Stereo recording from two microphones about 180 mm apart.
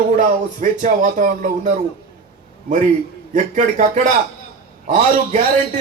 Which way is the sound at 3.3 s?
45° right (ahead or behind).